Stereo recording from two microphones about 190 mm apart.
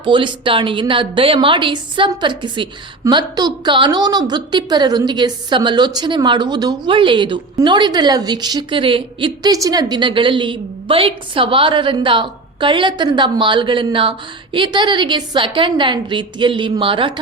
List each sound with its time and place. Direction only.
0.0 s a woman's voice: 25° right (ahead or behind)